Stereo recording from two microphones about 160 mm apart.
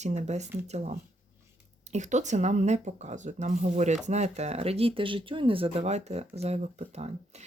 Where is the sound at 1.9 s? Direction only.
50° right (ahead or behind).